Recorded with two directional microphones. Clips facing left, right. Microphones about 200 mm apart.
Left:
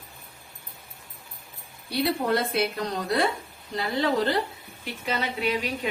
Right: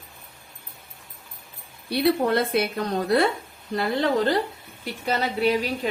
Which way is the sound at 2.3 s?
55° right (ahead or behind).